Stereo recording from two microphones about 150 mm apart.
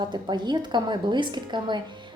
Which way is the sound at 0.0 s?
30° right (ahead or behind).